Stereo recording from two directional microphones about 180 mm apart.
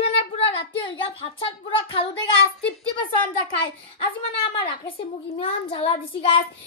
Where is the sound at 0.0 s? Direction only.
35° left (ahead or behind).